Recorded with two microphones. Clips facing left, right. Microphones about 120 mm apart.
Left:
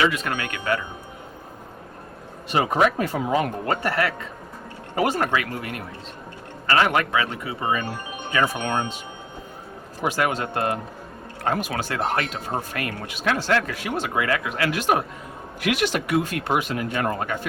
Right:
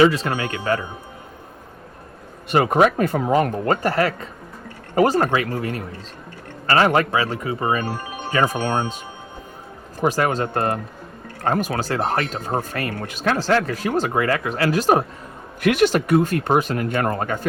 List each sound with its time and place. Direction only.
0.0 s speech: 30° right (ahead or behind)
2.5 s speech: 55° right (ahead or behind)
10.0 s speech: 40° right (ahead or behind)